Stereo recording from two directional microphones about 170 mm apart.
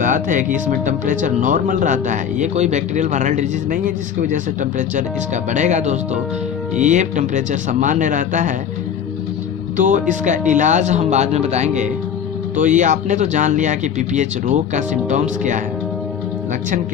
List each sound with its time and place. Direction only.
0.0 s speech: 50° right (ahead or behind)
9.7 s speech: 50° right (ahead or behind)